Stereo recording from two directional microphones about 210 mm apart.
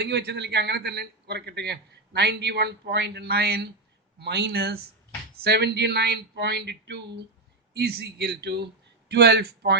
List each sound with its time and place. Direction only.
0.0 s a man's voice: 50° right (ahead or behind)